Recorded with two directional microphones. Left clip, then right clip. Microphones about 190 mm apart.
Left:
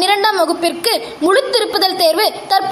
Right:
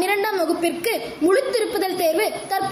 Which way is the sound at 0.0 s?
10° right (ahead or behind).